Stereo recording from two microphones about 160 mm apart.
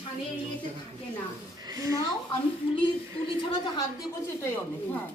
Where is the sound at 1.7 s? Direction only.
20° right (ahead or behind).